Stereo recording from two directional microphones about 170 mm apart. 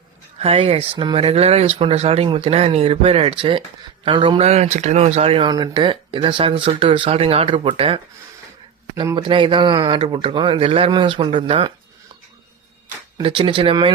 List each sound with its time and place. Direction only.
0.3 s speech: 35° right (ahead or behind)
9.1 s speech: 30° right (ahead or behind)
13.1 s speech: 30° right (ahead or behind)